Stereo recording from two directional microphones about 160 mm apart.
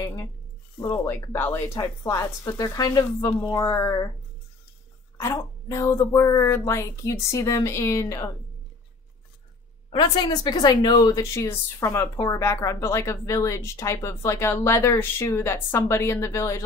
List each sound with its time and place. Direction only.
0.0 s speech: 20° left (ahead or behind)
5.1 s speech: 20° left (ahead or behind)
9.9 s speech: 25° left (ahead or behind)